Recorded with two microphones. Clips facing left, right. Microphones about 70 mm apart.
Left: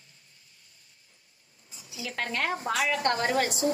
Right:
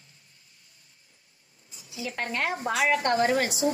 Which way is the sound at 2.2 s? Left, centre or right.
Right.